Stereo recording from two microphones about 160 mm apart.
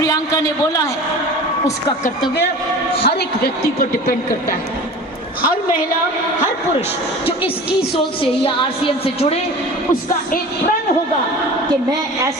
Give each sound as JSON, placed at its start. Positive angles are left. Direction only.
{"t": 3.0, "sound": "a woman's voice", "side_deg": 85}
{"t": 8.8, "sound": "a woman's voice", "side_deg": 40}